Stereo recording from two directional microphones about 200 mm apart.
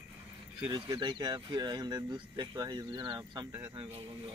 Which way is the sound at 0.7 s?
20° right (ahead or behind).